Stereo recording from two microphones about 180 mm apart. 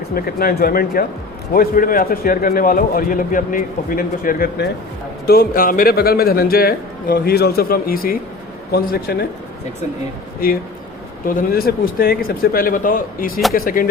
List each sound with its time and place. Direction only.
0.1 s a man's voice: 55° left (ahead or behind)
10.4 s a man's voice: 55° left (ahead or behind)